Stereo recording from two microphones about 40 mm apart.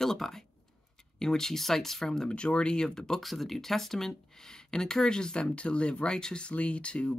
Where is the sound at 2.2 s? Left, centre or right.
Left.